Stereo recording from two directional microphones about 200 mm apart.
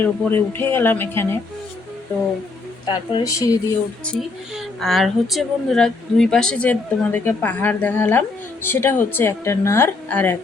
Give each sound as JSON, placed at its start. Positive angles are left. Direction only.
{"t": 0.0, "sound": "a woman's voice", "side_deg": 10}
{"t": 2.8, "sound": "speech", "side_deg": 25}
{"t": 4.0, "sound": "a woman's voice", "side_deg": 0}